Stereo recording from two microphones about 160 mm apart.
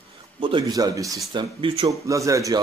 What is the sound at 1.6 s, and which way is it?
Speech, 35° right (ahead or behind).